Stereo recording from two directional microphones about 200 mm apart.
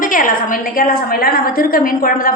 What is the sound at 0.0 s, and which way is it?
A woman's voice, 40° left (ahead or behind).